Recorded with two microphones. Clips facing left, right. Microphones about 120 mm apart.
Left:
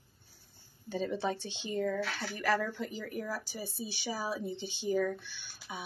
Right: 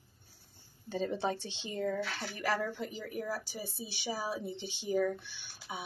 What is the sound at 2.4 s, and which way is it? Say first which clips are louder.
Speech: left 2 dB; 20° right (ahead or behind).